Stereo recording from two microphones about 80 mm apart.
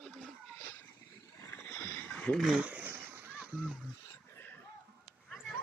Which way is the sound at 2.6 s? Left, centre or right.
Centre.